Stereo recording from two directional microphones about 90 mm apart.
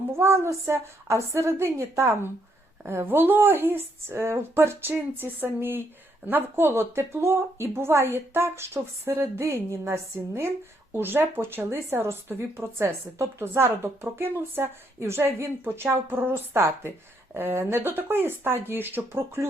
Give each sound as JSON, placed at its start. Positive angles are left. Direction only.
{"t": 0.1, "sound": "speech", "side_deg": -30}